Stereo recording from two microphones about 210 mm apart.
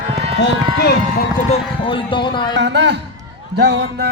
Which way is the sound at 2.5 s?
55° right (ahead or behind).